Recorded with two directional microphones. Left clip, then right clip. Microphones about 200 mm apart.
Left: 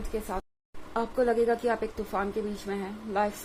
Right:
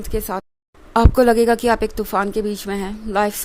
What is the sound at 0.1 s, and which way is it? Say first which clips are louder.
Speech: right 9 dB; 55° right (ahead or behind).